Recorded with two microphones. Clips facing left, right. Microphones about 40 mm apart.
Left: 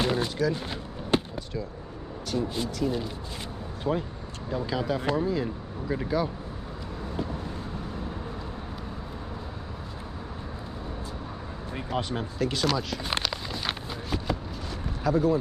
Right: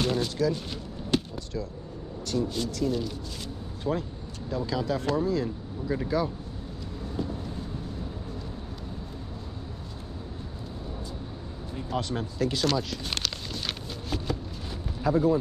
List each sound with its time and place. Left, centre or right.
0.0 s a sound: centre
2.3 s speech: centre
11.9 s speech: centre
12.4 s speech: centre
13.1 s a sound: centre
15.0 s speech: centre